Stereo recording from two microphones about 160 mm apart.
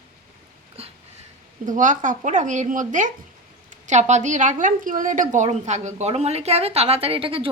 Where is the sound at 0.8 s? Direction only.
40° right (ahead or behind).